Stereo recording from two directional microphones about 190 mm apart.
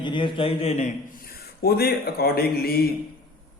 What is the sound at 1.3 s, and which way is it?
Mantra, 55° left (ahead or behind).